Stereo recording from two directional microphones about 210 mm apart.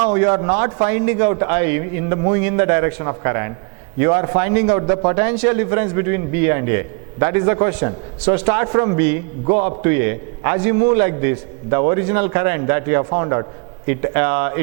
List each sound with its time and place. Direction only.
0.0 s a man's voice: 10° right (ahead or behind)